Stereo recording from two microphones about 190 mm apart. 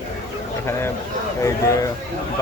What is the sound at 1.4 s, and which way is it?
Speech, 15° left (ahead or behind).